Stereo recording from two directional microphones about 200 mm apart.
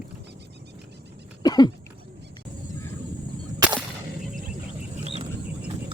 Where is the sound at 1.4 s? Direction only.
20° left (ahead or behind).